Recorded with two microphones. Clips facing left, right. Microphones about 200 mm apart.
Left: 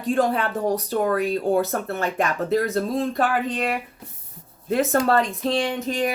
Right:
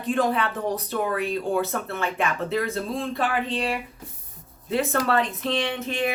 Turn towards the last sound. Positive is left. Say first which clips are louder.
# left 2 dB
turn(degrees=40)  # may be behind; listen again after turning